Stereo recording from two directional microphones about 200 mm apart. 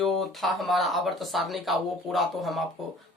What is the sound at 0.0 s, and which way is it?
Speech, centre (ahead or behind).